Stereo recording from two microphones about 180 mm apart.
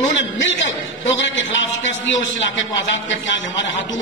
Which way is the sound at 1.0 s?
90° left.